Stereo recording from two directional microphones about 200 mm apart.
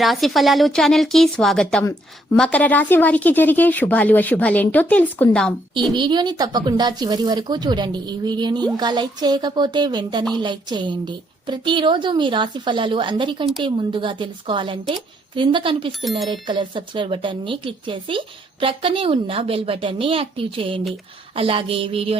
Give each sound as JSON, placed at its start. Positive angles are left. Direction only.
{"t": 0.0, "sound": "a woman's voice", "side_deg": 0}
{"t": 5.9, "sound": "a woman's voice", "side_deg": -20}
{"t": 16.0, "sound": "a woman's voice", "side_deg": 0}
{"t": 16.3, "sound": "a woman's voice", "side_deg": -25}